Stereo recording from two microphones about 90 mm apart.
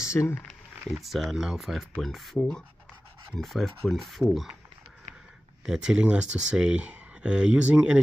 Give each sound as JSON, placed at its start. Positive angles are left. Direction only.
{"t": 0.2, "sound": "speech", "side_deg": 20}
{"t": 0.5, "sound": "speech", "side_deg": 0}
{"t": 5.7, "sound": "speech", "side_deg": -5}